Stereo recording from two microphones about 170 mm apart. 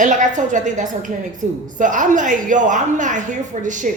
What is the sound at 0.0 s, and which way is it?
A woman's voice, 45° right (ahead or behind).